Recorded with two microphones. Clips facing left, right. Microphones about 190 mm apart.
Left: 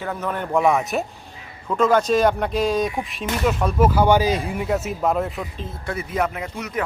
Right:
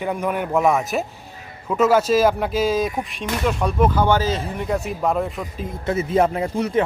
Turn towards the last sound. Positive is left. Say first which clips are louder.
# right 7 dB
turn(degrees=-30)  # may be behind; listen again after turning